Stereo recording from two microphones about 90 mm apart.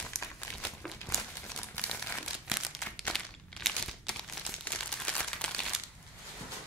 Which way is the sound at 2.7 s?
5° left (ahead or behind).